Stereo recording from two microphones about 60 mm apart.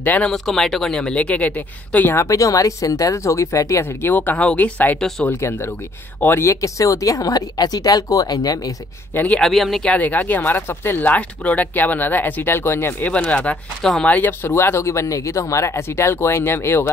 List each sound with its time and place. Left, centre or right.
0.3 s a woman's voice: centre; by 2.1 s left
2.1 s speech: left
4.0 s speech: left
4.4 s speech: left
5.4 s speech: left
6.4 s speech: left
9.4 s speech: centre
9.8 s speech: left
11.1 s speech: left
13.0 s speech: left
14.4 s speech: left